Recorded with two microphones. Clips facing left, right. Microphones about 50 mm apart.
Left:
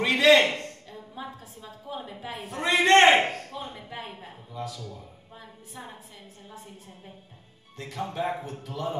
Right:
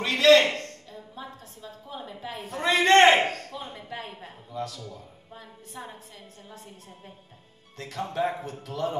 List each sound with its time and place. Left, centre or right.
0.0 s a sound: centre
0.6 s a woman's voice: centre
7.7 s speech: centre